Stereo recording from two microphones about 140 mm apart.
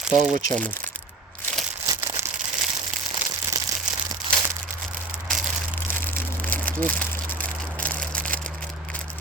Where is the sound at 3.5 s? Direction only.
25° right (ahead or behind).